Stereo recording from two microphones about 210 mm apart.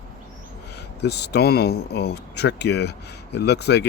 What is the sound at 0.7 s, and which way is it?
Speech, 50° left (ahead or behind).